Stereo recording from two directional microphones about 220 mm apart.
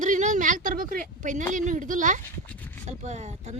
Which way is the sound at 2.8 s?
30° right (ahead or behind).